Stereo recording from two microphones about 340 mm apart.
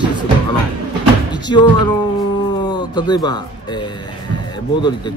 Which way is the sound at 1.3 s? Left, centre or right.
Centre.